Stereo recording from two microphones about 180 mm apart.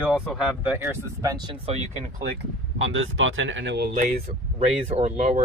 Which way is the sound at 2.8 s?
90° right.